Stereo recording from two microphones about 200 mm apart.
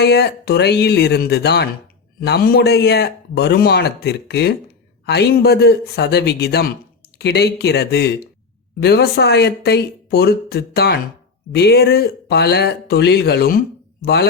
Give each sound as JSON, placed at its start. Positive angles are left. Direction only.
{"t": 0.0, "sound": "a man's voice", "side_deg": 55}